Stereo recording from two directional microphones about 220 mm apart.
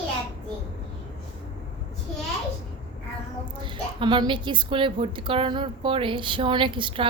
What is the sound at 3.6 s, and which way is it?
A woman's voice, 20° right (ahead or behind).